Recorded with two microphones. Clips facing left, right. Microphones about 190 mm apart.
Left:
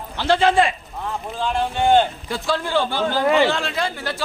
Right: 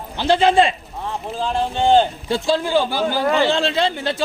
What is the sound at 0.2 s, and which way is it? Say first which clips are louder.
A man's voice: right 2 dB; 20° right (ahead or behind).